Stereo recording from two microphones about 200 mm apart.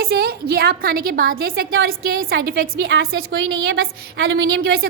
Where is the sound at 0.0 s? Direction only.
50° right (ahead or behind).